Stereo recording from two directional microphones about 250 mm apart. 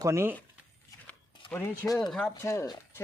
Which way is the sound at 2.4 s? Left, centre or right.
Centre.